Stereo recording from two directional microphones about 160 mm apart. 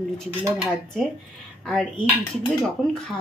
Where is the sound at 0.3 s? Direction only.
15° right (ahead or behind).